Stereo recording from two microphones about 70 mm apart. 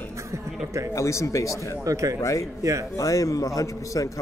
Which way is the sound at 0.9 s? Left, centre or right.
Left.